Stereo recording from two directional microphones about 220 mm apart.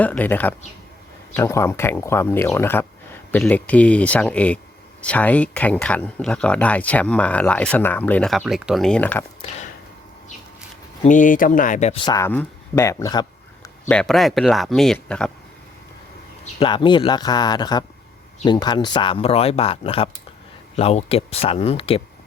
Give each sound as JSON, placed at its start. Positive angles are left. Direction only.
{"t": 0.0, "sound": "speech", "side_deg": 5}
{"t": 11.0, "sound": "speech", "side_deg": 35}
{"t": 12.0, "sound": "speech", "side_deg": 15}
{"t": 13.9, "sound": "speech", "side_deg": 5}
{"t": 16.4, "sound": "speech", "side_deg": 25}